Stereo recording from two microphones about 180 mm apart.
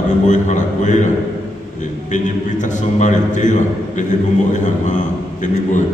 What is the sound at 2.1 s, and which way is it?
A man's voice, 45° left (ahead or behind).